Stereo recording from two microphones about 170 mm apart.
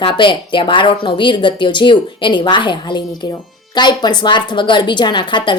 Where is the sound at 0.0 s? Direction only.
30° left (ahead or behind).